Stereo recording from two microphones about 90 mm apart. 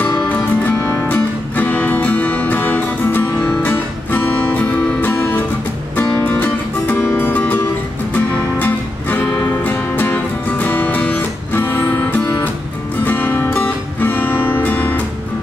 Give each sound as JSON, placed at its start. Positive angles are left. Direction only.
{"t": 0.3, "sound": "music", "side_deg": 20}